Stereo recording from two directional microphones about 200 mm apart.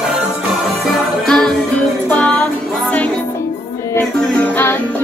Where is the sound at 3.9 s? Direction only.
10° left (ahead or behind).